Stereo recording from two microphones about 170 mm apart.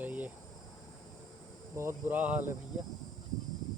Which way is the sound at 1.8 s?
15° right (ahead or behind).